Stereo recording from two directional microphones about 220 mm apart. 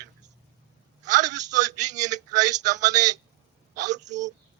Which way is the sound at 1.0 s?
35° right (ahead or behind).